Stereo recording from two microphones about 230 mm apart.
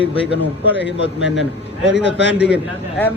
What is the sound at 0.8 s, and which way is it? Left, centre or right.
A man's voice, left.